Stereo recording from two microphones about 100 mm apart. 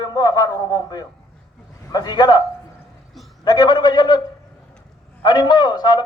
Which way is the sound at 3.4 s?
45° left (ahead or behind).